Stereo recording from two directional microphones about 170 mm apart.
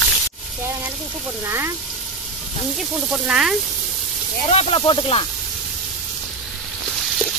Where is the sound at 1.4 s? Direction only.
15° right (ahead or behind).